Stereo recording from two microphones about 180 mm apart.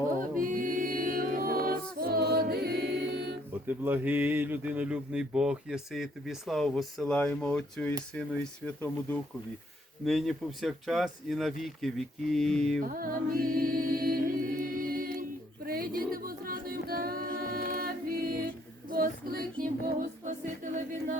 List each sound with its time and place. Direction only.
0.2 s music: 50° right (ahead or behind); by 3.3 s 65° right (ahead or behind)
3.7 s speech: 10° right (ahead or behind)
12.8 s music: 50° right (ahead or behind)
15.6 s a sound: 55° right (ahead or behind)
16.1 s a capella: 55° right (ahead or behind)
18.9 s female singing: 55° right (ahead or behind)
19.8 s music: 50° right (ahead or behind)